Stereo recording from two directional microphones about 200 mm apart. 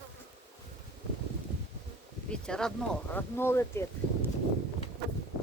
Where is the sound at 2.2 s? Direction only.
5° left (ahead or behind).